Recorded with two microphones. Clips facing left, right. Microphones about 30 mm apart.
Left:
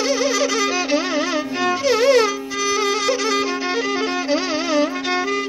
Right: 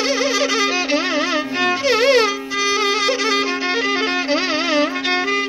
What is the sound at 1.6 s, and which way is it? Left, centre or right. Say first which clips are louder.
Music: right 1 dB; right.